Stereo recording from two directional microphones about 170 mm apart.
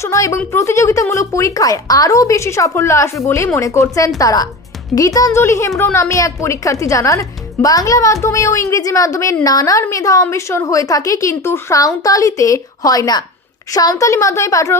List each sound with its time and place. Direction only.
0.0 s a woman's voice: 20° left (ahead or behind)